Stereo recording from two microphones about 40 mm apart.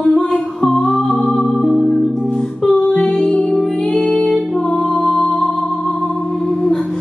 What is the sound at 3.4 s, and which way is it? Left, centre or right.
Music, centre.